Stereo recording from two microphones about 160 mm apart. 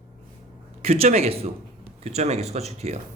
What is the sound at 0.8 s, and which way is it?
Speech, 40° right (ahead or behind).